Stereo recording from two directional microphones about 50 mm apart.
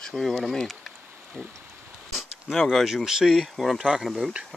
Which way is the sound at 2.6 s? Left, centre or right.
Centre.